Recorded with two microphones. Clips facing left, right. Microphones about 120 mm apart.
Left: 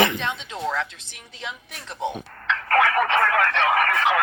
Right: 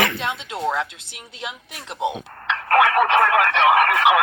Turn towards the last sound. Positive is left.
turn(degrees=-10)  # may be behind; listen again after turning